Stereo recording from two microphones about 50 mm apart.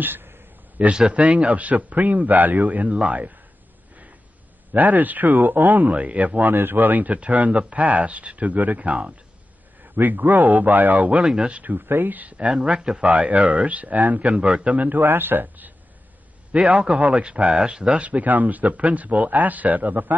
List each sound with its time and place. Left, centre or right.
0.0 s a sound: right
0.9 s speech: right
4.7 s speech: right
6.5 s speech: right
9.9 s speech: right; by 11.6 s centre
11.6 s speech: right
16.6 s speech: right
17.5 s speech: centre
18.0 s speech: right